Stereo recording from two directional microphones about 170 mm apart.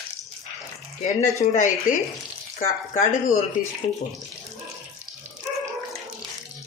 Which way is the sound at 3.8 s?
30° left (ahead or behind).